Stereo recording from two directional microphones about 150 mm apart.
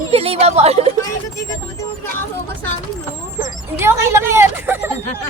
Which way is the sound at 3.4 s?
15° right (ahead or behind).